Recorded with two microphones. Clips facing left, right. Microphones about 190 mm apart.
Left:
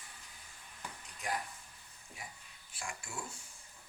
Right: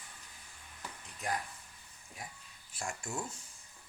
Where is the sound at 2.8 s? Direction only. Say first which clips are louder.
Right 5 dB; 45° right (ahead or behind).